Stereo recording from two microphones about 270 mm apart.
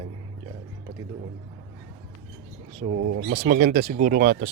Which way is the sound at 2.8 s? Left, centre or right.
Right.